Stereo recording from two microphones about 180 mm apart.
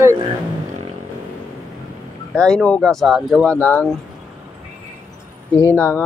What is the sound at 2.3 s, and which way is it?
Speech, 5° left (ahead or behind).